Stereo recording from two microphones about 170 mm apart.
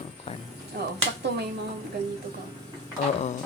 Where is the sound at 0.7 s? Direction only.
75° right (ahead or behind).